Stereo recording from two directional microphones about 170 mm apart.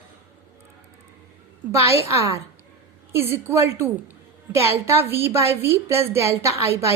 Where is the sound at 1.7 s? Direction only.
15° right (ahead or behind).